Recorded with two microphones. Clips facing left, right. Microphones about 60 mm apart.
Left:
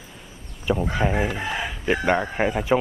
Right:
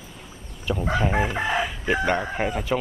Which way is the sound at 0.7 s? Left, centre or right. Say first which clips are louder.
Left 1 dB; centre.